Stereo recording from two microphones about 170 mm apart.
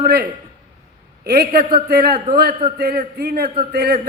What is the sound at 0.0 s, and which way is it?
A man's voice, 65° right (ahead or behind).